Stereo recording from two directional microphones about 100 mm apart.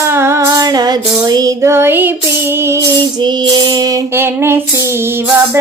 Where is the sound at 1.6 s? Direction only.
25° right (ahead or behind).